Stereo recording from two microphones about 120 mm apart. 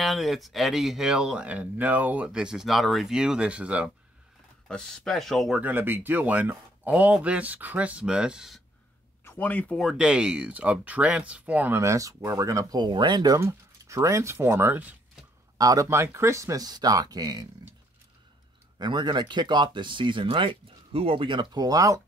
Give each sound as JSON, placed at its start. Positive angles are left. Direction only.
{"t": 0.0, "sound": "speech", "side_deg": 0}
{"t": 4.6, "sound": "speech", "side_deg": 5}
{"t": 5.6, "sound": "speech", "side_deg": -15}
{"t": 9.2, "sound": "speech", "side_deg": 15}
{"t": 9.8, "sound": "speech", "side_deg": -5}
{"t": 11.8, "sound": "speech", "side_deg": -25}
{"t": 13.4, "sound": "speech", "side_deg": -25}
{"t": 15.5, "sound": "speech", "side_deg": -30}
{"t": 18.8, "sound": "speech", "side_deg": -40}